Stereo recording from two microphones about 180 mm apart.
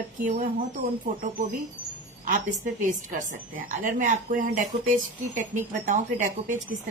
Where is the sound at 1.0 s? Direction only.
45° right (ahead or behind).